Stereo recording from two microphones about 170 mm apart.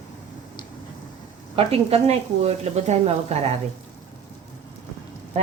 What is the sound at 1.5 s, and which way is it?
Speech, 35° right (ahead or behind).